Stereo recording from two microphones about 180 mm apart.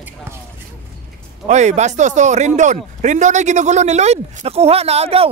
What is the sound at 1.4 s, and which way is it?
Speech, 40° right (ahead or behind).